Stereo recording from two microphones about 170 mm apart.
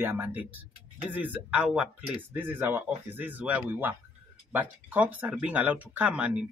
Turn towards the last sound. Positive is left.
turn(degrees=-5)  # may be behind; listen again after turning